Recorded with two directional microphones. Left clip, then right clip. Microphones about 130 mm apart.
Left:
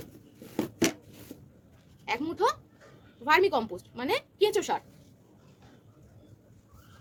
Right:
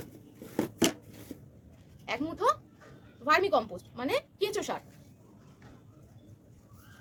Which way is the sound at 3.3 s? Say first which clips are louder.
Left 2 dB; 40° left (ahead or behind).